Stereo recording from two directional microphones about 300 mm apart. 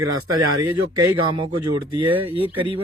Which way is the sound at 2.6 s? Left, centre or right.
Centre.